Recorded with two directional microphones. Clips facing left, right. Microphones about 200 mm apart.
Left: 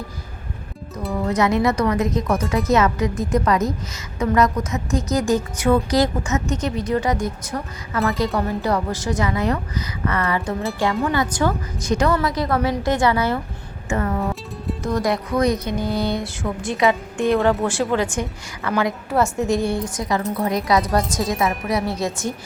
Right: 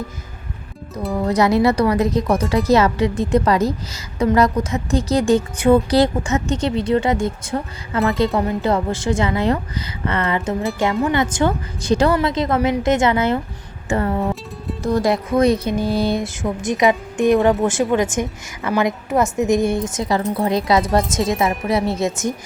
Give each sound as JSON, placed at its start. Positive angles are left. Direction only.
{"t": 1.2, "sound": "a woman's voice", "side_deg": -35}